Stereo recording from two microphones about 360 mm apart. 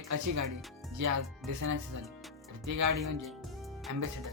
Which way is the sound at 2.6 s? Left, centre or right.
Right.